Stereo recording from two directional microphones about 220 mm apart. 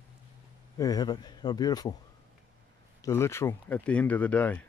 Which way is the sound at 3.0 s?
10° left (ahead or behind).